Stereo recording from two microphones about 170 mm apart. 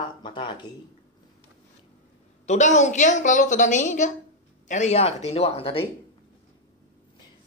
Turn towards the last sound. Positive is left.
turn(degrees=35)  # may be behind; listen again after turning